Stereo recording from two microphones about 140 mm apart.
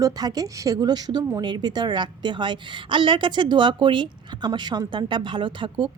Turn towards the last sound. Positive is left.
turn(degrees=-35)  # may be behind; listen again after turning